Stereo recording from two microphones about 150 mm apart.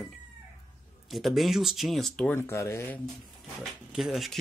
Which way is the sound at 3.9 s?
Centre (ahead or behind).